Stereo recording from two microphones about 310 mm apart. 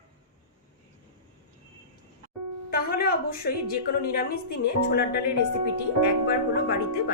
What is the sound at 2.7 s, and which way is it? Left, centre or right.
A woman's voice, left.